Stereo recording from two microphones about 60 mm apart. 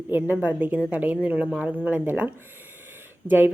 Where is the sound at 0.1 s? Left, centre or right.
Right; by 1.9 s centre.